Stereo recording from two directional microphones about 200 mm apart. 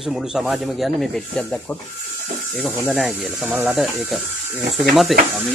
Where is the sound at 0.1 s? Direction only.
Centre (ahead or behind).